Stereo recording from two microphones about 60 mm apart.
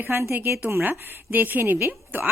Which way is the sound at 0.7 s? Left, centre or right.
Right.